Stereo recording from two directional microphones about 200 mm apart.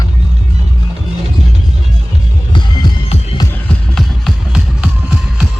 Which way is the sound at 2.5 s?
25° left (ahead or behind).